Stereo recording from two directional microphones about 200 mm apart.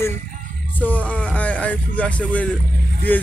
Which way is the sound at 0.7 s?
10° left (ahead or behind).